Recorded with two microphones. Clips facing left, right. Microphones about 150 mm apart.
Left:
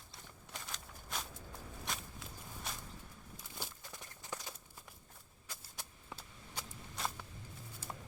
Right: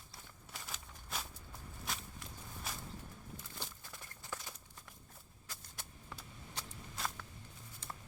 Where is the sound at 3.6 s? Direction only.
10° left (ahead or behind).